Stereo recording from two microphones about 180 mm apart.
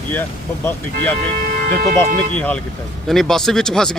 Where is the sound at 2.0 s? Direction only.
5° left (ahead or behind).